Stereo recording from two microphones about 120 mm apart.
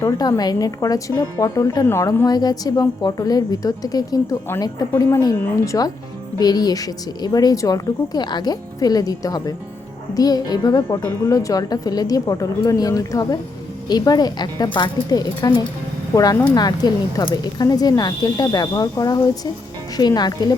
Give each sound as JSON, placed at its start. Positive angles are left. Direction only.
{"t": 0.0, "sound": "a woman's voice", "side_deg": 35}